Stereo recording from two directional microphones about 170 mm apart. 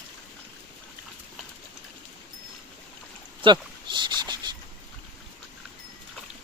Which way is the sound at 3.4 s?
25° right (ahead or behind).